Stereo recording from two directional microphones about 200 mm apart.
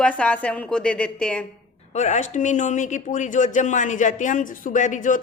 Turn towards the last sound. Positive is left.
turn(degrees=40)  # may be behind; listen again after turning